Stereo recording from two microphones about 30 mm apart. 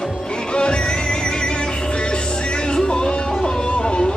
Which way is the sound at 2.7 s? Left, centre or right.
Left.